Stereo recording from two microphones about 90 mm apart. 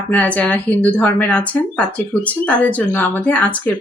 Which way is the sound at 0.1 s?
20° left (ahead or behind).